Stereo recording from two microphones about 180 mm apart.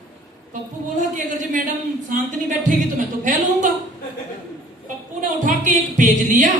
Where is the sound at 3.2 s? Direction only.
45° right (ahead or behind).